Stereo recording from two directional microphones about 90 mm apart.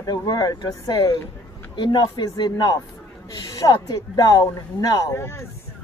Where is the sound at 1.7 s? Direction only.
60° left (ahead or behind).